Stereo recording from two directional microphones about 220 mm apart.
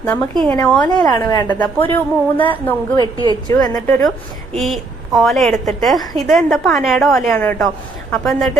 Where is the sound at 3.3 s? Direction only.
20° left (ahead or behind).